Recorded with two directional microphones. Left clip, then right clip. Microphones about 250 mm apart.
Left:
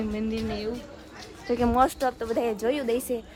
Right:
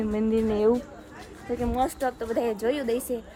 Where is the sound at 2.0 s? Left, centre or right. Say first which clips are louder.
Left 1 dB; centre.